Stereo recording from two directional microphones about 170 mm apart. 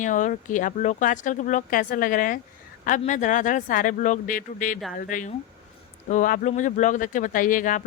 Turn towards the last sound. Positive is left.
turn(degrees=50)  # may be behind; listen again after turning